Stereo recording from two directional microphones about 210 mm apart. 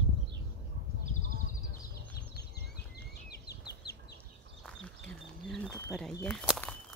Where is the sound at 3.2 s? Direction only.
50° left (ahead or behind).